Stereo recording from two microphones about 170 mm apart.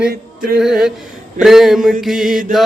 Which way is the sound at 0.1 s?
65° right (ahead or behind).